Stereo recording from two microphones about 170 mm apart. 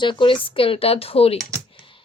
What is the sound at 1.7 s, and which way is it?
Computer keyboard, 30° left (ahead or behind).